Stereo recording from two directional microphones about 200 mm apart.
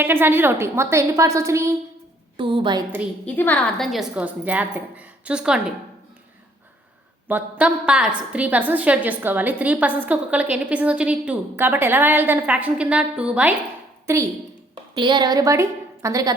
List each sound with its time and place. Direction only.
0.0 s a woman's voice: 10° right (ahead or behind)
3.2 s a woman's voice: 10° left (ahead or behind)
7.3 s a woman's voice: 10° right (ahead or behind)
14.9 s a woman's voice: 25° right (ahead or behind)